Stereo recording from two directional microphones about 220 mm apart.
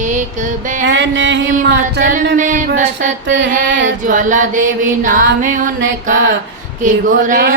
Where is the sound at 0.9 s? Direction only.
55° right (ahead or behind).